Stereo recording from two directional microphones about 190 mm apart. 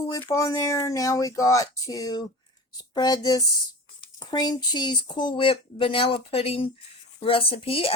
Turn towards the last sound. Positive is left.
turn(degrees=30)  # may be behind; listen again after turning